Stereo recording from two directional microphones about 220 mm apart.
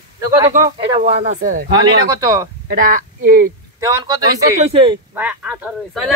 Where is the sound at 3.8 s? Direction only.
15° right (ahead or behind).